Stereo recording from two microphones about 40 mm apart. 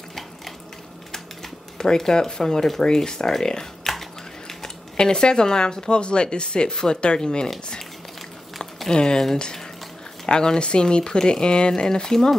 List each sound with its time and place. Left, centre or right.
1.8 s speech: centre
4.9 s speech: centre
8.5 s a sound: centre
8.9 s speech: centre